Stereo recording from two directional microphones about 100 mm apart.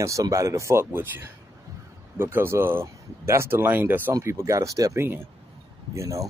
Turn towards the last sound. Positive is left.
turn(degrees=-30)  # may be behind; listen again after turning